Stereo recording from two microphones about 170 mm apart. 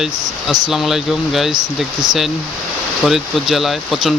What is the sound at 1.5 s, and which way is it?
Speech, 25° right (ahead or behind).